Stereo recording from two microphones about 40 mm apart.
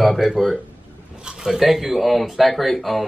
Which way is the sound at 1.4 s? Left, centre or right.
Centre.